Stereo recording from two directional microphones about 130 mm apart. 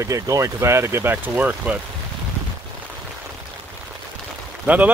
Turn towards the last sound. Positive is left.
turn(degrees=-10)  # may be behind; listen again after turning